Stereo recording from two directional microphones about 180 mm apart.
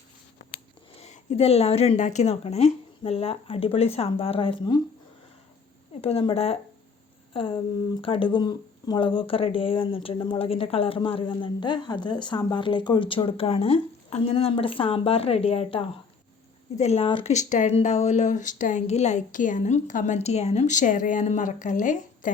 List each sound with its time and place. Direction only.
0.9 s speech: 40° left (ahead or behind)
5.9 s speech: 35° left (ahead or behind)
17.3 s speech: 40° left (ahead or behind)